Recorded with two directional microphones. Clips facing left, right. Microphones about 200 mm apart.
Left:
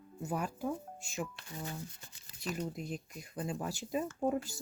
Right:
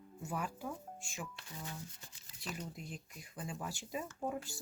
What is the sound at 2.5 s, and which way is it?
Speech, 50° left (ahead or behind).